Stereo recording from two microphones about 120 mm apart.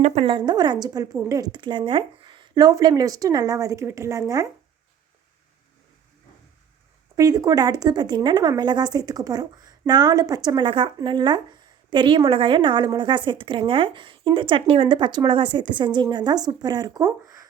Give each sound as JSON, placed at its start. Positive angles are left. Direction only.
{"t": 0.0, "sound": "a woman's voice", "side_deg": -60}
{"t": 7.2, "sound": "a woman's voice", "side_deg": -30}